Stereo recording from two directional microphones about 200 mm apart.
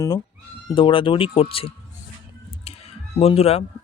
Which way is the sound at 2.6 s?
30° left (ahead or behind).